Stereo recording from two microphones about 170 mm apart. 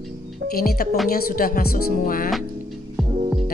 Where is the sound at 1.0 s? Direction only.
60° left (ahead or behind).